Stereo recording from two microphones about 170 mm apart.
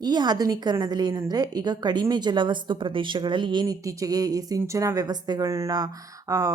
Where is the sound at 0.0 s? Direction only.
25° right (ahead or behind).